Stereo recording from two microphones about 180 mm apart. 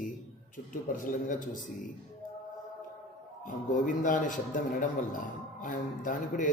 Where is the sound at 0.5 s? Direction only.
50° left (ahead or behind).